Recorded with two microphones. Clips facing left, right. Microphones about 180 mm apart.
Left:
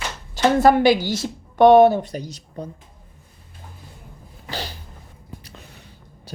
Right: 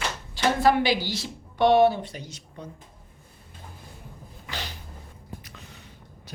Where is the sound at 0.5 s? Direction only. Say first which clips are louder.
Left 7 dB; 45° left (ahead or behind).